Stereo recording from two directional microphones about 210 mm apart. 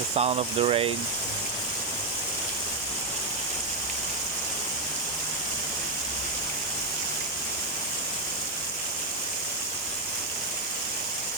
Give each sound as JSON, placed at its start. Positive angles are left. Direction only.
{"t": 0.2, "sound": "speech", "side_deg": -30}